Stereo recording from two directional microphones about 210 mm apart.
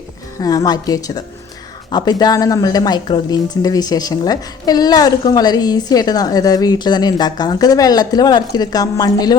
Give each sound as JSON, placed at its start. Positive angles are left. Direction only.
{"t": 0.3, "sound": "a woman's voice", "side_deg": 15}